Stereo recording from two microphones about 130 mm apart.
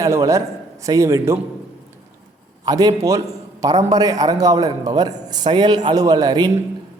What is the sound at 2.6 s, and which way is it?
A man's voice, 30° right (ahead or behind).